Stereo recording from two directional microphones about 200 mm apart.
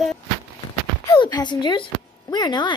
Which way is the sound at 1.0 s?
20° left (ahead or behind).